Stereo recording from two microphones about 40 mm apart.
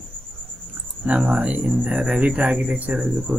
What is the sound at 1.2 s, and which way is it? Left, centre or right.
Speech, right.